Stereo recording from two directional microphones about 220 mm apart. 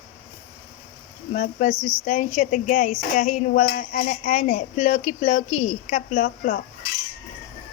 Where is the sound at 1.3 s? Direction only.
35° left (ahead or behind).